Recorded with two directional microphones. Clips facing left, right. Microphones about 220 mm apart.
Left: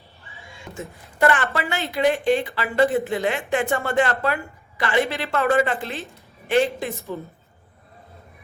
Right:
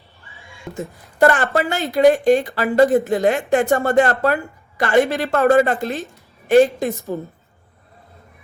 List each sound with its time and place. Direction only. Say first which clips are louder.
0.7 s speech: right 6 dB; 40° right (ahead or behind)